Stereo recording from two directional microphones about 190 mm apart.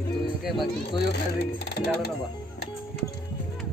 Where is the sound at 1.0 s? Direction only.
60° left (ahead or behind).